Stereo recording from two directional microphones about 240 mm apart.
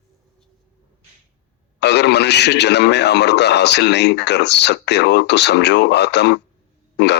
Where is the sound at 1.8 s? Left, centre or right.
Left.